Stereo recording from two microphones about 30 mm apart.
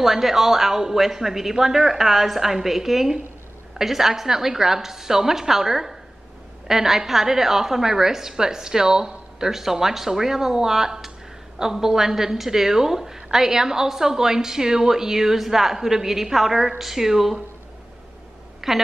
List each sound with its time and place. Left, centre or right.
0.0 s a woman's voice: centre
18.6 s a woman's voice: centre